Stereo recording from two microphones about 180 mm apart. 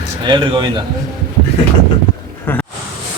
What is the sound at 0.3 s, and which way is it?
Speech, 25° right (ahead or behind).